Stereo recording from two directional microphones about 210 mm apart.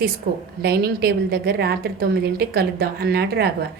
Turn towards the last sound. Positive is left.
turn(degrees=-50)  # may be behind; listen again after turning